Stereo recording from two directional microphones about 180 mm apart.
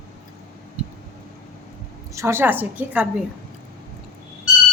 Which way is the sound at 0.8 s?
5° right (ahead or behind).